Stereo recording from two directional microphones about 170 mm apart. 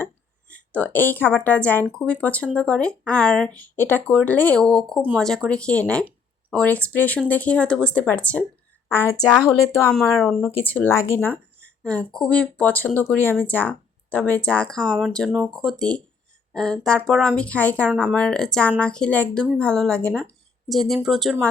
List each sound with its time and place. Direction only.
0.5 s a woman's voice: 10° left (ahead or behind)
10.2 s speech: centre (ahead or behind)
10.5 s speech: 10° left (ahead or behind)